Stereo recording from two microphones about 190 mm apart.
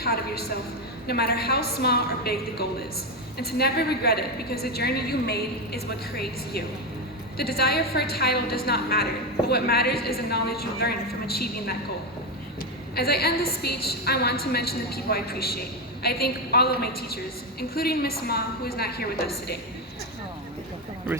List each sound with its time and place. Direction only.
0.0 s a woman's voice: 55° left (ahead or behind)
13.0 s a woman's voice: 55° left (ahead or behind)